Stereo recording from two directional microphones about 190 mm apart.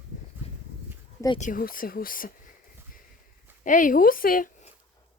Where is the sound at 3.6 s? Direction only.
45° left (ahead or behind).